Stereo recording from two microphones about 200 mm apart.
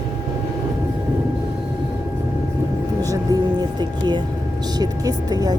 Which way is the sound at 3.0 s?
20° right (ahead or behind).